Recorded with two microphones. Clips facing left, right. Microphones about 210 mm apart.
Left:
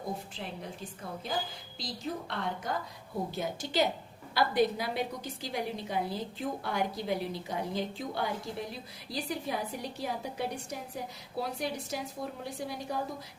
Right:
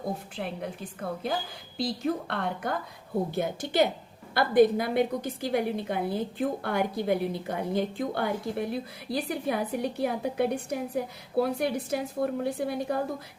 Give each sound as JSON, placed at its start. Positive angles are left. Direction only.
{"t": 1.2, "sound": "a woman's voice", "side_deg": -60}